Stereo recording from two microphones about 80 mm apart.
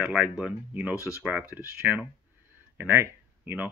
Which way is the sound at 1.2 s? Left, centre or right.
Right.